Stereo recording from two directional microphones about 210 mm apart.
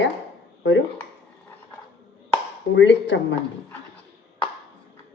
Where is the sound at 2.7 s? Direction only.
60° left (ahead or behind).